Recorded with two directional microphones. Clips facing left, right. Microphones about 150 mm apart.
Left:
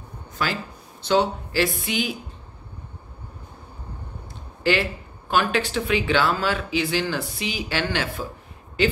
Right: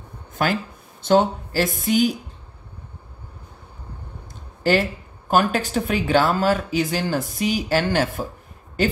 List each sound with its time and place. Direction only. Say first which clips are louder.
0.3 s a sound: right 5 dB; 50° right (ahead or behind)
1.0 s speech: right 3 dB; 45° right (ahead or behind)
4.6 s speech: right 3 dB; 45° right (ahead or behind)